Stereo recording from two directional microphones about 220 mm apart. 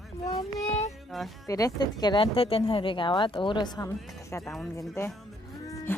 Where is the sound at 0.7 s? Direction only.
30° left (ahead or behind).